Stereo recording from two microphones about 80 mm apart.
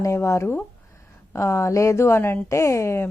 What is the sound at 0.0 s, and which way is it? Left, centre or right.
A woman's voice, left.